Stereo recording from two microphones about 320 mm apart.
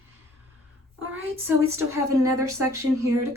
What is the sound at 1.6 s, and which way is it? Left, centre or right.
Speech, right.